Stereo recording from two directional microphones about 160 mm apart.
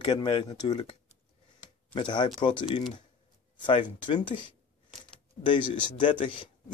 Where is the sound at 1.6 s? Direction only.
30° left (ahead or behind).